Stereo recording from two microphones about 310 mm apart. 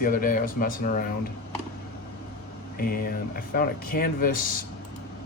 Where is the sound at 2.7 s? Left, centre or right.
Left.